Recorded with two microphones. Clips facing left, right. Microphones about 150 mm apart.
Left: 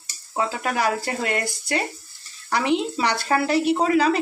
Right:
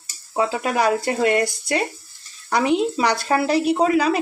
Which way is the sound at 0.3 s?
20° right (ahead or behind).